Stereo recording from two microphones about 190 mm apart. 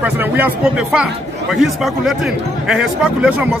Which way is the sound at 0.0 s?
10° right (ahead or behind).